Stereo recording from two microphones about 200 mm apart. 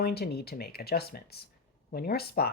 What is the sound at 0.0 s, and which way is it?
Speech, 50° left (ahead or behind).